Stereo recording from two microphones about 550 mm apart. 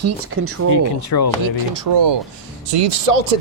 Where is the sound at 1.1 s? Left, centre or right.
Left.